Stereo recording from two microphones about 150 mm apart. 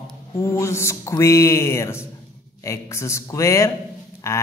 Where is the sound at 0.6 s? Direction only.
20° left (ahead or behind).